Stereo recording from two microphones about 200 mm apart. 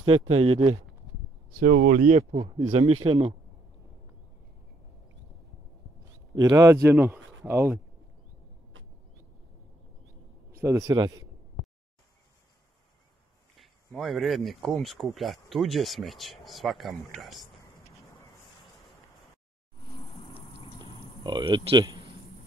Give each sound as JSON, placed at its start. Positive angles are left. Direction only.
{"t": 0.3, "sound": "speech", "side_deg": -30}
{"t": 1.6, "sound": "speech", "side_deg": -40}
{"t": 6.3, "sound": "a man's voice", "side_deg": -20}
{"t": 8.7, "sound": "vehicle", "side_deg": -75}
{"t": 10.5, "sound": "a man's voice", "side_deg": -15}
{"t": 13.6, "sound": "speech", "side_deg": 0}
{"t": 21.2, "sound": "speech", "side_deg": -20}